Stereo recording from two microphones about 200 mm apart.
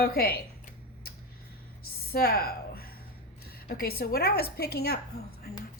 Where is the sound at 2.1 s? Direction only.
50° left (ahead or behind).